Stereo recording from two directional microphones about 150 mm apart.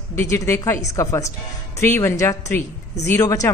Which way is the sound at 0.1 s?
15° left (ahead or behind).